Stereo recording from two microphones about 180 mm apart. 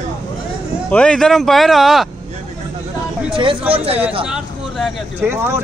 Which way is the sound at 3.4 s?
30° right (ahead or behind).